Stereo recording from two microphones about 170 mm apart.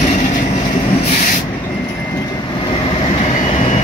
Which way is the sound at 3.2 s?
45° left (ahead or behind).